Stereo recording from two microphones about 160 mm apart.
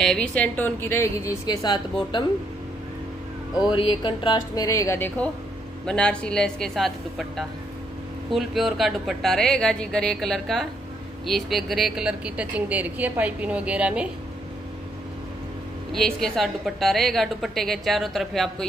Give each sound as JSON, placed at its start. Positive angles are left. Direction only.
{"t": 0.0, "sound": "a woman's voice", "side_deg": 5}
{"t": 3.6, "sound": "a woman's voice", "side_deg": 30}
{"t": 15.9, "sound": "a woman's voice", "side_deg": 0}